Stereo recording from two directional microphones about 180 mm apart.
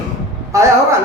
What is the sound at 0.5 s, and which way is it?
Speech, 15° right (ahead or behind).